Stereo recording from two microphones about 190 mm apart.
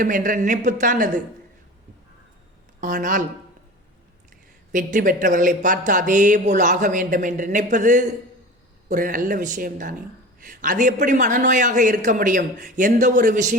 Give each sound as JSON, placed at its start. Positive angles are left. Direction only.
{"t": 0.0, "sound": "speech", "side_deg": -45}
{"t": 2.8, "sound": "speech", "side_deg": -45}
{"t": 4.7, "sound": "speech", "side_deg": -45}